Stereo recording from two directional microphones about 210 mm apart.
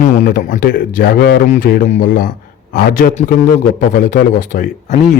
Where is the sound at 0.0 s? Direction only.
40° left (ahead or behind).